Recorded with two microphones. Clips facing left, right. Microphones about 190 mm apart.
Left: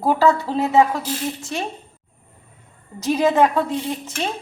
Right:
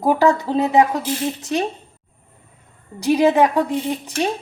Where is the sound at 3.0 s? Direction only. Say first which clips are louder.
Right 2 dB; 15° right (ahead or behind).